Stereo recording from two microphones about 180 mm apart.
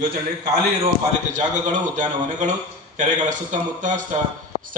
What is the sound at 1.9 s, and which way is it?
Speech, 45° right (ahead or behind).